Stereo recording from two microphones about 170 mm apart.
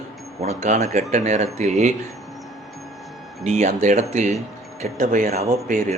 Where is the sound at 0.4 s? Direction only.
45° right (ahead or behind).